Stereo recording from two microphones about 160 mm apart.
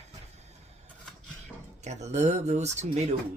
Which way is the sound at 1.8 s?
45° right (ahead or behind).